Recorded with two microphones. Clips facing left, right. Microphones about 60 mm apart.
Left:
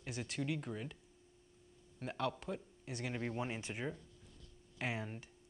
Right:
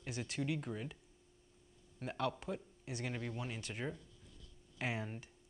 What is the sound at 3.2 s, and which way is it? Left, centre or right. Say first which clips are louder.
Speech: left 3 dB; left.